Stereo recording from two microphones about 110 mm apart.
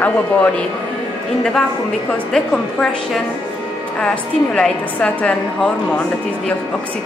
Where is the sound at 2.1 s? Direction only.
5° left (ahead or behind).